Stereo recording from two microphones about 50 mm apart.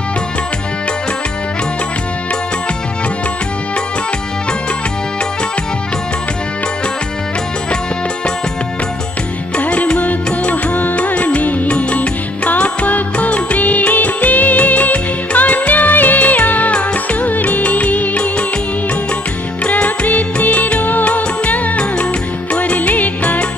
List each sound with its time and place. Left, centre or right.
9.6 s music: left
19.6 s music: left